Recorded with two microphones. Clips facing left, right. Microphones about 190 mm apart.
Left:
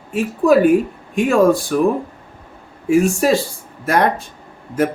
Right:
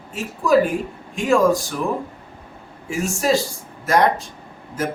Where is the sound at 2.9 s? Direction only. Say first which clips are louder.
Left 6 dB; 60° left (ahead or behind).